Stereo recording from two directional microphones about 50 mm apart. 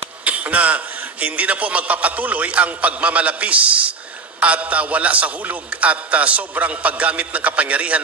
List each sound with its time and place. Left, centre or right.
0.2 s a man's voice: right